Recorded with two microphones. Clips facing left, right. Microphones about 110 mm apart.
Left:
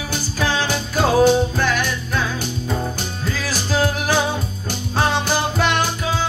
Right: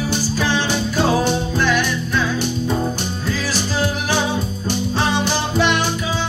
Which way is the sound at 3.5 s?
45° left (ahead or behind).